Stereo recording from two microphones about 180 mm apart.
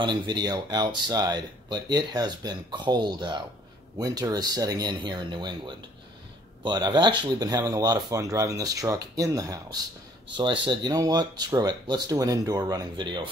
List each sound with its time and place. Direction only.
0.0 s speech: 25° right (ahead or behind)